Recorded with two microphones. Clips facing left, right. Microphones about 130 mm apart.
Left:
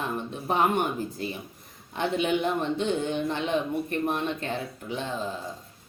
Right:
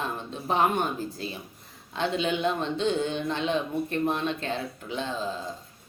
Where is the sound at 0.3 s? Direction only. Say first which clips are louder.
Even; 15° left (ahead or behind).